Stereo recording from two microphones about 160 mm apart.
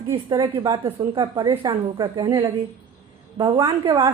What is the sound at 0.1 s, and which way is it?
A woman's voice, 25° right (ahead or behind).